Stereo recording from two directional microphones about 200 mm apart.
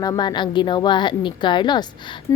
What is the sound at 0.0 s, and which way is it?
Speech, 20° left (ahead or behind).